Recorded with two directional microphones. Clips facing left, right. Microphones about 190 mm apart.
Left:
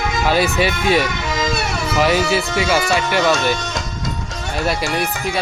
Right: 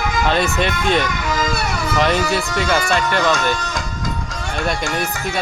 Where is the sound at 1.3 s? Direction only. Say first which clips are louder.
Even; 25° left (ahead or behind).